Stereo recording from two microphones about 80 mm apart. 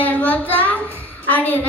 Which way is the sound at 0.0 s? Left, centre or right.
Left.